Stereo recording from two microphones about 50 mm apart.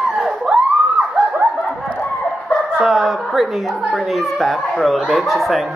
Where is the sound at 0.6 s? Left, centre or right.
Right.